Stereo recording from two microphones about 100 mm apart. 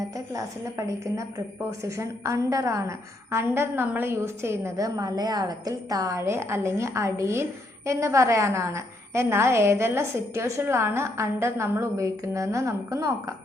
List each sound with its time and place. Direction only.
0.0 s a woman's voice: 30° right (ahead or behind)